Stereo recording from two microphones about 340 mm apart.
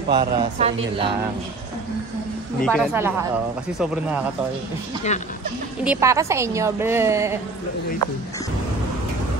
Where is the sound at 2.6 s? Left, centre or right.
Centre.